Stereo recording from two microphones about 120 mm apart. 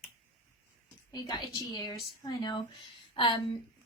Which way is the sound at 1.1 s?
35° left (ahead or behind).